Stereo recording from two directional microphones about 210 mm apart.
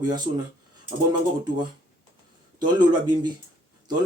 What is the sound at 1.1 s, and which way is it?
Speech, 20° right (ahead or behind).